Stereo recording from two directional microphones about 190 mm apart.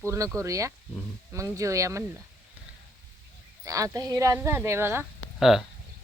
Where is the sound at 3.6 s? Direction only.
15° right (ahead or behind).